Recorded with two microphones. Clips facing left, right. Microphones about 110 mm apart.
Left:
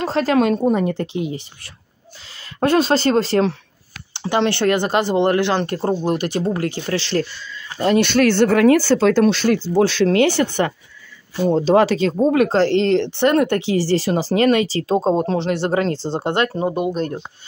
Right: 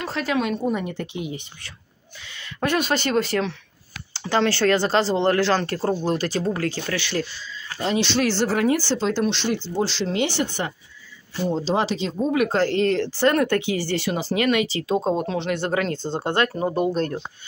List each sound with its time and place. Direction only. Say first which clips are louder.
0.0 s speech: left 7 dB; 35° left (ahead or behind)
2.1 s speech: left 5 dB; 35° left (ahead or behind)
4.3 s speech: left 2 dB; 20° left (ahead or behind)
6.9 s speech: left 5 dB; 40° left (ahead or behind)
7.8 s speech: left 7 dB; 55° left (ahead or behind); by 16.6 s 25° left (ahead or behind)
16.6 s speech: left 1 dB; 15° left (ahead or behind)